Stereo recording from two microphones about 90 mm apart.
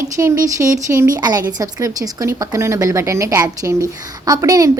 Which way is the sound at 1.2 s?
50° right (ahead or behind).